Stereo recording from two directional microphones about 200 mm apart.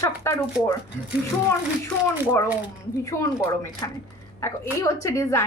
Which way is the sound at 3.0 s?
15° left (ahead or behind).